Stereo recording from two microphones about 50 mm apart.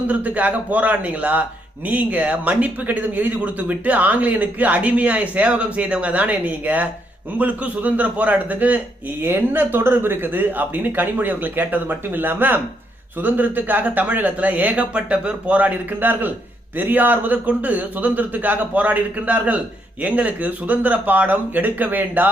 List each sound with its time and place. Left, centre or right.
0.1 s a man's voice: right